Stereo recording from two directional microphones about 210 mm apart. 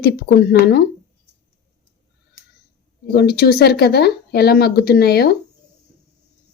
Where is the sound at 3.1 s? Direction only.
50° left (ahead or behind).